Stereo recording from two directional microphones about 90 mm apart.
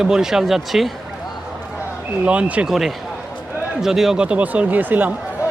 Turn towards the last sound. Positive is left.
turn(degrees=-20)  # may be behind; listen again after turning